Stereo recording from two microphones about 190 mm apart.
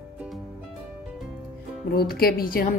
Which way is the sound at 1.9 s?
55° left (ahead or behind).